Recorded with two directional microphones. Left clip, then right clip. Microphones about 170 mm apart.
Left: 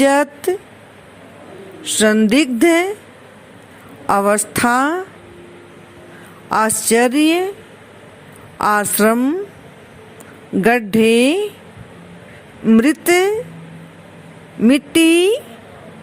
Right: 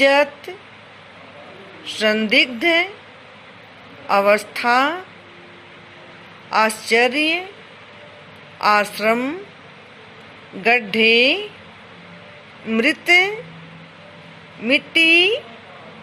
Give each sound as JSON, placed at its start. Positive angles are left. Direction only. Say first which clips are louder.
{"t": 0.0, "sound": "speech", "louder": "left 1 dB", "side_deg": 90}
{"t": 1.8, "sound": "speech", "louder": "left 4 dB", "side_deg": 90}
{"t": 4.0, "sound": "speech", "louder": "even", "side_deg": 90}
{"t": 6.5, "sound": "speech", "louder": "left 2 dB", "side_deg": 90}
{"t": 8.5, "sound": "speech", "louder": "left 1 dB", "side_deg": 90}
{"t": 10.6, "sound": "speech", "louder": "left 2 dB", "side_deg": 90}
{"t": 12.6, "sound": "speech", "louder": "left 3 dB", "side_deg": 85}
{"t": 14.6, "sound": "speech", "louder": "left 2 dB", "side_deg": 90}